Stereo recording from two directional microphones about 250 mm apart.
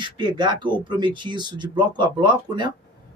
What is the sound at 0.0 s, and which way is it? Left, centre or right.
Speech, centre.